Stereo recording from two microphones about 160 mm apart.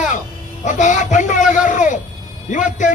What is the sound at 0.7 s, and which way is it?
A man's voice, 50° left (ahead or behind).